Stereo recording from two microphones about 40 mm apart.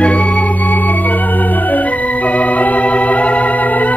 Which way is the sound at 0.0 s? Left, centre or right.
Left.